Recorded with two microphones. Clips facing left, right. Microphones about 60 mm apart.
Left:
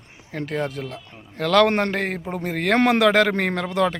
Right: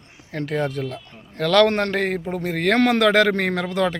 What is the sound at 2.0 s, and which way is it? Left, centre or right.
A man's voice, centre.